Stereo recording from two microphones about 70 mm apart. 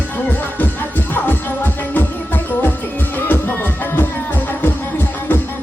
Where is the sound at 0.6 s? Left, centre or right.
Left.